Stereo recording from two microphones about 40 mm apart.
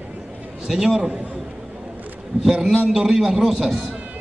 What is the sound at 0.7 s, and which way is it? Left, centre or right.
Speech, centre.